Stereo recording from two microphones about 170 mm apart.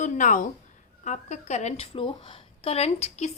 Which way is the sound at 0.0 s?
50° left (ahead or behind).